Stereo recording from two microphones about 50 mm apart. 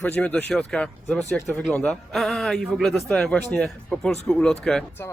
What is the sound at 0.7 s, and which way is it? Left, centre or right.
Speech, centre.